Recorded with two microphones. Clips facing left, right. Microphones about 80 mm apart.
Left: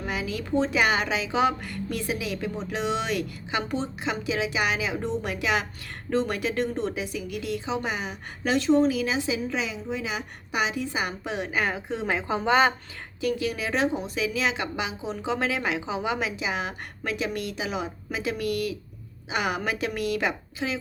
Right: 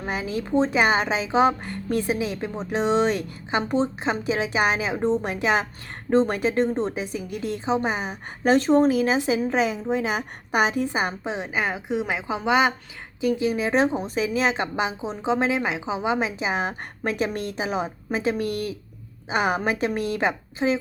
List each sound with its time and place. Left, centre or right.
0.0 s a woman's voice: right
11.2 s a woman's voice: right
13.2 s speech: right